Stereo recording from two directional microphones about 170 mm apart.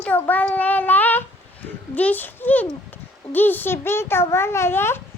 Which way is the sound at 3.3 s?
10° left (ahead or behind).